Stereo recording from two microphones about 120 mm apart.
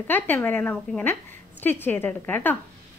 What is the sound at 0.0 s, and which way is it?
A woman's voice, 15° left (ahead or behind).